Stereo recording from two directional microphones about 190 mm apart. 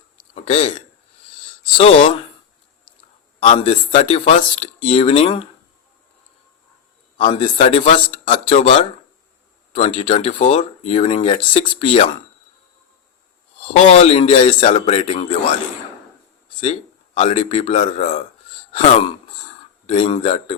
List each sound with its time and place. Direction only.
0.3 s speech: 30° left (ahead or behind)
1.8 s a man's voice: 30° left (ahead or behind)
3.6 s speech: 30° left (ahead or behind)
7.2 s a man's voice: 25° left (ahead or behind)
13.9 s speech: 30° left (ahead or behind)
17.2 s speech: 30° left (ahead or behind)